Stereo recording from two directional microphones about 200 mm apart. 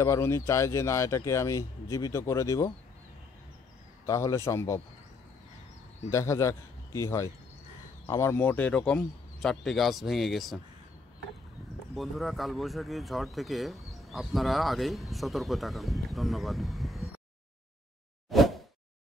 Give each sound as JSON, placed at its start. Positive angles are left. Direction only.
{"t": 0.0, "sound": "speech", "side_deg": 15}
{"t": 4.0, "sound": "speech", "side_deg": 15}
{"t": 6.0, "sound": "a man's voice", "side_deg": 15}
{"t": 11.9, "sound": "speech", "side_deg": 0}
{"t": 18.3, "sound": "a sound", "side_deg": 0}